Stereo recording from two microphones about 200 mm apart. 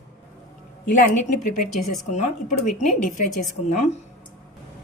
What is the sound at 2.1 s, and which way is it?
A woman's voice, 35° left (ahead or behind).